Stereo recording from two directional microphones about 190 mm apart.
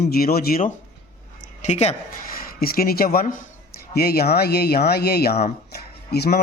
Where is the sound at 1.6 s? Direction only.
35° left (ahead or behind).